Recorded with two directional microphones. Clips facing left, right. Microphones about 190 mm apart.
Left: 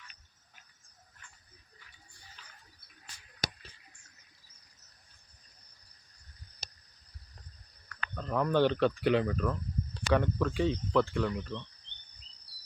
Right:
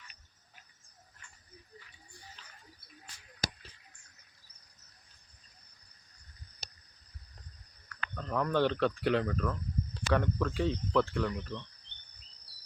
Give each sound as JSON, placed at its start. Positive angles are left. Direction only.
{"t": 8.1, "sound": "speech", "side_deg": 5}